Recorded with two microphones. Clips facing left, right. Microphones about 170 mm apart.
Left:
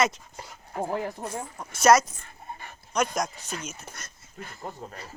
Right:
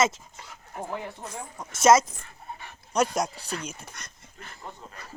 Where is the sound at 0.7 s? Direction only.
45° left (ahead or behind).